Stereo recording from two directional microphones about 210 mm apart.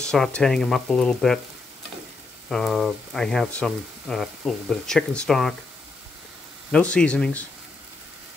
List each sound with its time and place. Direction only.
0.0 s speech: 5° left (ahead or behind)
2.5 s speech: centre (ahead or behind)
6.7 s speech: 5° left (ahead or behind)